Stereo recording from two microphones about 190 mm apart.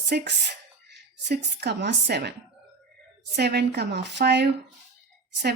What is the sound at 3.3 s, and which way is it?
Speech, 60° right (ahead or behind).